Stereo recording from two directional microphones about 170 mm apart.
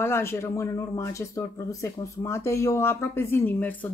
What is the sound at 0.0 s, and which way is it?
Speech, 15° left (ahead or behind).